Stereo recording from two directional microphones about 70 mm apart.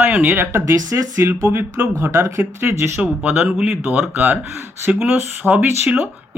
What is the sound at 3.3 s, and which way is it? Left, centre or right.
Speech, centre.